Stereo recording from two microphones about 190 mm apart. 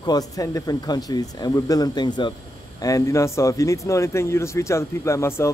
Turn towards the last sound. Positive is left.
turn(degrees=15)  # may be behind; listen again after turning